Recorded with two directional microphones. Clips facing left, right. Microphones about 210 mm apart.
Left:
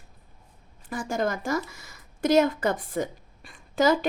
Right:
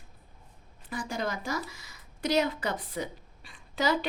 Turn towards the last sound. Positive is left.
turn(degrees=45)  # may be behind; listen again after turning